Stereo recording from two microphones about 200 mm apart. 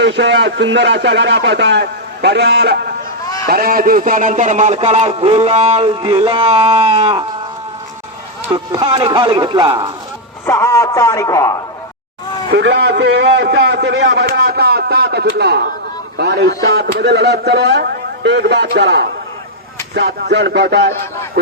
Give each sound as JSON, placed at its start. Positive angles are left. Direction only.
{"t": 0.0, "sound": "a man's voice", "side_deg": -60}
{"t": 8.5, "sound": "speech", "side_deg": -20}
{"t": 10.4, "sound": "a man's voice", "side_deg": 15}
{"t": 12.5, "sound": "a man's voice", "side_deg": -60}